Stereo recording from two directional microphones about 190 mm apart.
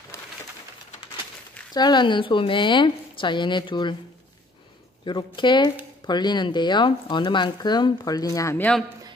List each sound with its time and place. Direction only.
1.7 s speech: 20° left (ahead or behind)
5.0 s speech: 25° left (ahead or behind); by 8.8 s 10° left (ahead or behind)